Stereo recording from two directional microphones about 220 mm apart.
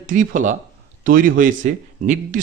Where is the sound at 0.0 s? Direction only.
35° right (ahead or behind).